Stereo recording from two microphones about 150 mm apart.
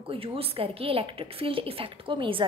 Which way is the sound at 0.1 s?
40° right (ahead or behind).